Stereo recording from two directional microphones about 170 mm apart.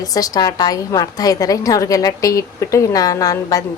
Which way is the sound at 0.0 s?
20° left (ahead or behind).